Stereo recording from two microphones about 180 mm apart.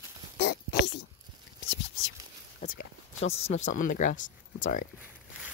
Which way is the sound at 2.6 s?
55° left (ahead or behind).